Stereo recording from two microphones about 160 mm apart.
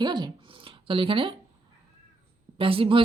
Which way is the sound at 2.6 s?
35° right (ahead or behind).